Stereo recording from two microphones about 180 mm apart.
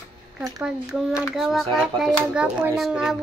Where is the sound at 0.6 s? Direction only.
Centre (ahead or behind).